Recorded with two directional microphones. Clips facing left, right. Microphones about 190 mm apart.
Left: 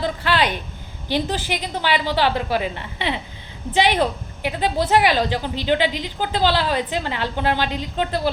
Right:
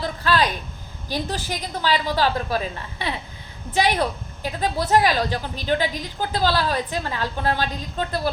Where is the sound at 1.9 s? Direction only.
15° left (ahead or behind).